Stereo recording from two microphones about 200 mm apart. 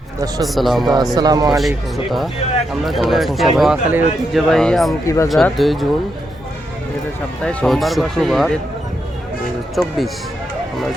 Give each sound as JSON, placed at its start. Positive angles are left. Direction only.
{"t": 0.4, "sound": "speech", "side_deg": 0}
{"t": 0.9, "sound": "speech", "side_deg": -20}
{"t": 1.5, "sound": "speech", "side_deg": 0}
{"t": 5.0, "sound": "speech", "side_deg": 15}
{"t": 5.3, "sound": "speech", "side_deg": 0}
{"t": 7.4, "sound": "speech", "side_deg": 0}
{"t": 9.8, "sound": "speech", "side_deg": 0}